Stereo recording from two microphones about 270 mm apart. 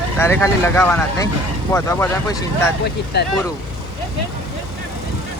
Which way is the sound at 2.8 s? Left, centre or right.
Left.